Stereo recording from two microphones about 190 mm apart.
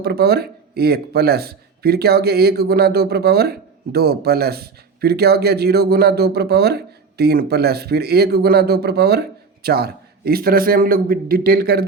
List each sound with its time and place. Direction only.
0.0 s a man's voice: 55° right (ahead or behind)